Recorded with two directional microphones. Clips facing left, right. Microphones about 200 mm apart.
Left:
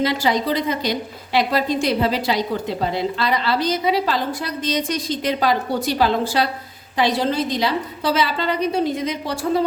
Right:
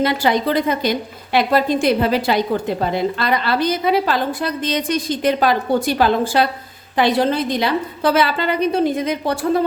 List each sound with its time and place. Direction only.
0.0 s a woman's voice: 55° right (ahead or behind)